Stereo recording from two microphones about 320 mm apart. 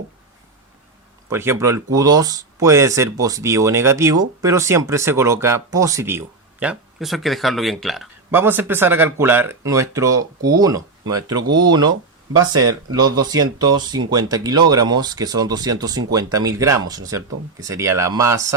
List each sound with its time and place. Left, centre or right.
1.3 s speech: centre